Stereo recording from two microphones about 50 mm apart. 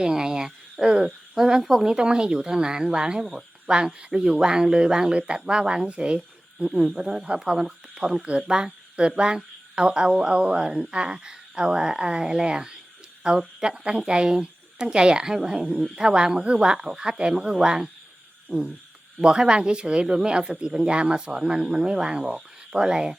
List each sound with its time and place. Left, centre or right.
0.0 s speech: centre
18.4 s a sound: centre
19.2 s speech: centre